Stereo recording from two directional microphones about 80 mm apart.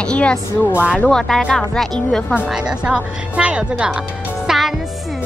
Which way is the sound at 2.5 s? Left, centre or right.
Centre.